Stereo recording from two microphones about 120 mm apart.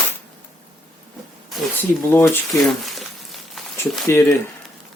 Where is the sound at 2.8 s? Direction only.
Centre (ahead or behind).